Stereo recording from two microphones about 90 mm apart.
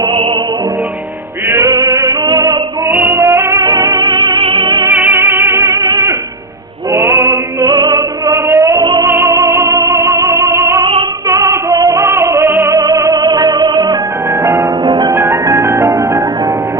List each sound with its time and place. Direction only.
1.5 s music: 35° right (ahead or behind)
2.0 s music: 60° right (ahead or behind)
2.9 s music: 25° right (ahead or behind)
3.9 s music: 65° right (ahead or behind)
4.9 s music: 25° right (ahead or behind)
6.9 s music: 30° right (ahead or behind)
7.6 s music: 50° right (ahead or behind)
8.3 s a sound: 35° right (ahead or behind)
8.8 s music: 55° right (ahead or behind)
9.0 s music: 30° right (ahead or behind)
12.7 s music: 40° right (ahead or behind)
14.4 s harp: 30° right (ahead or behind)
14.8 s harp: 55° right (ahead or behind)
15.1 s music: 30° right (ahead or behind)